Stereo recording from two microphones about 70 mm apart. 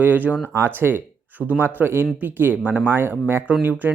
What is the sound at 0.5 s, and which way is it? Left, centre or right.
Speech, right.